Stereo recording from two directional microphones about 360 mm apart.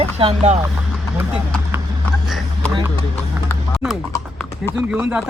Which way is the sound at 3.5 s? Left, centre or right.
Centre.